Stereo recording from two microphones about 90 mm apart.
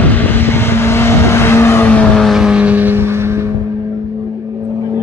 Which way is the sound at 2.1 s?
Centre (ahead or behind).